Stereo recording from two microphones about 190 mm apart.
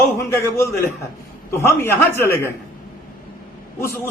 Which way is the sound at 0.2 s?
15° left (ahead or behind).